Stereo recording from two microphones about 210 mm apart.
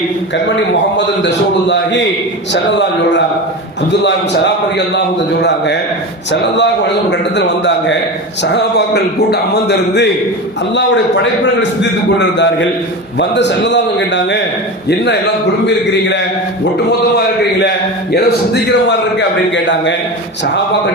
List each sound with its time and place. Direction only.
0.4 s a man's voice: 60° left (ahead or behind)
4.9 s a man's voice: 55° left (ahead or behind)
11.8 s a man's voice: 55° left (ahead or behind)